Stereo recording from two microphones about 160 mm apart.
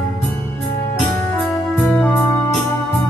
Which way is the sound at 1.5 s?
Centre (ahead or behind).